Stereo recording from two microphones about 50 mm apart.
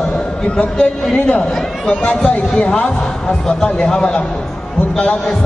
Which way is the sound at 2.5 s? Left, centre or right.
Centre.